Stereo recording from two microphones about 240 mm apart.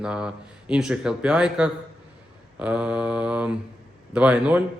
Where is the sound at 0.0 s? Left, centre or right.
Centre.